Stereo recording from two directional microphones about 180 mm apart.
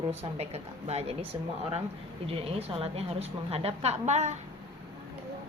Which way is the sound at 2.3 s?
35° right (ahead or behind).